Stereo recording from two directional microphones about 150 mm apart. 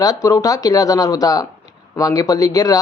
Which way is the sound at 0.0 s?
25° left (ahead or behind).